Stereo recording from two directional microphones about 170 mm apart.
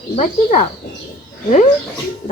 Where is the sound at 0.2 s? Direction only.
45° left (ahead or behind).